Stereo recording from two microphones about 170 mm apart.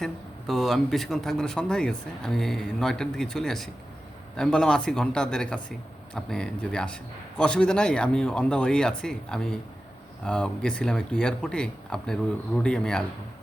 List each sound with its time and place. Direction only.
0.0 s a man's voice: centre (ahead or behind)